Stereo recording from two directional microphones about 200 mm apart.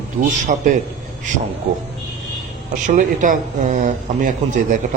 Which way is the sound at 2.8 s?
40° right (ahead or behind).